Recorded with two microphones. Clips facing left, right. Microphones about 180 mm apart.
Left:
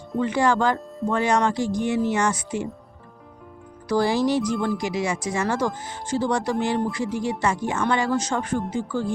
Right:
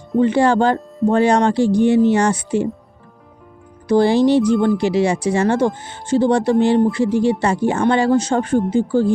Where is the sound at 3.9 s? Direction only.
25° right (ahead or behind).